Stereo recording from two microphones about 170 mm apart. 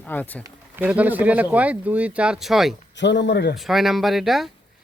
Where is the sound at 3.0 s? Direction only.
90° left.